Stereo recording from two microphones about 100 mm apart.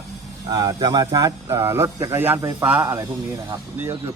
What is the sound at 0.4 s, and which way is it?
Speech, 45° right (ahead or behind).